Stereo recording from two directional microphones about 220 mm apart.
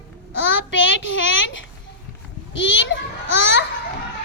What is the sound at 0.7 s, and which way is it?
Child singing, 60° left (ahead or behind).